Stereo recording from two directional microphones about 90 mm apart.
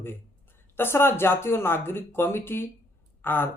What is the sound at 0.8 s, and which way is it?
Speech, 25° left (ahead or behind).